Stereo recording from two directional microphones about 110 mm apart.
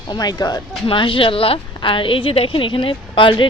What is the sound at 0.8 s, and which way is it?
A woman's voice, 50° left (ahead or behind).